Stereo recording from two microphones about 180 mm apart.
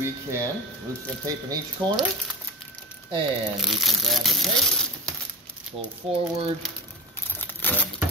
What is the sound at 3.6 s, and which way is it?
Speech, centre (ahead or behind).